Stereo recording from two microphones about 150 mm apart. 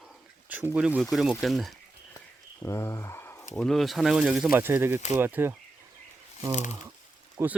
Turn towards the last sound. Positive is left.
turn(degrees=-20)  # may be behind; listen again after turning